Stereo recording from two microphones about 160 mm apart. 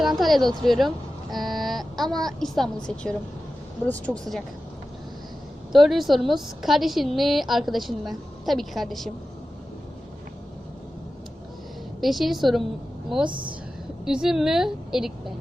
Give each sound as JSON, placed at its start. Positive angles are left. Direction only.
{"t": 0.2, "sound": "speech", "side_deg": 0}
{"t": 5.7, "sound": "a woman's voice", "side_deg": 0}
{"t": 11.9, "sound": "a woman's voice", "side_deg": 0}
{"t": 13.2, "sound": "speech", "side_deg": -30}
{"t": 14.0, "sound": "a woman's voice", "side_deg": -5}